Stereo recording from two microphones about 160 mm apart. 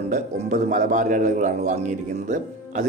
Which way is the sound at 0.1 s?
50° right (ahead or behind).